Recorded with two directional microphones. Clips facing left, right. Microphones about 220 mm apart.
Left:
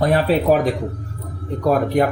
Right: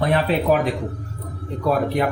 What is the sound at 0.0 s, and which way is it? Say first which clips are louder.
Speech: left 3 dB; 45° left (ahead or behind).